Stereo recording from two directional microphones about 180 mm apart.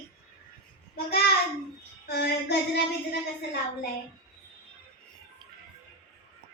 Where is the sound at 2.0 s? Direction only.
65° left (ahead or behind).